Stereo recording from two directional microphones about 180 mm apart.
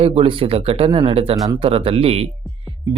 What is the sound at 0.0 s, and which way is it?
Speech, 30° right (ahead or behind).